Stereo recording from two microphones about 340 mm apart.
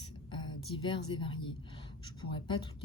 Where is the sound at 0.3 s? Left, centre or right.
Centre.